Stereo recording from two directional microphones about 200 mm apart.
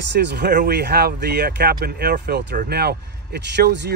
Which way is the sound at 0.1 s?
60° right (ahead or behind).